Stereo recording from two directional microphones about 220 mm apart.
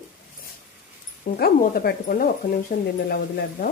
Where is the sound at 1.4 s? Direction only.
45° left (ahead or behind).